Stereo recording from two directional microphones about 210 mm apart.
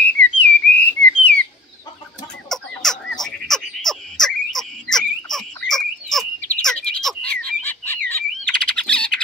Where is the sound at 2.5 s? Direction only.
Centre (ahead or behind).